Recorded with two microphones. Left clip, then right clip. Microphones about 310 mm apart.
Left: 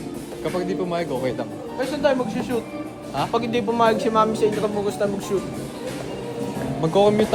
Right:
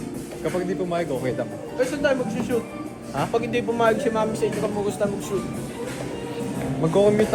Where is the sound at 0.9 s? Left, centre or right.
Centre.